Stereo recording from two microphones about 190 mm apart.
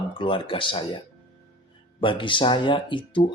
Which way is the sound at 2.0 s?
25° left (ahead or behind).